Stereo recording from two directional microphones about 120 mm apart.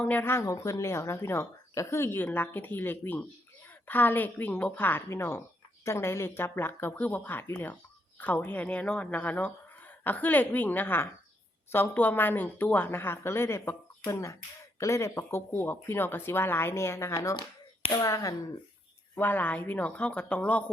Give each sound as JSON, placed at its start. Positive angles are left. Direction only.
{"t": 0.0, "sound": "a woman's voice", "side_deg": 15}
{"t": 19.1, "sound": "a woman's voice", "side_deg": 15}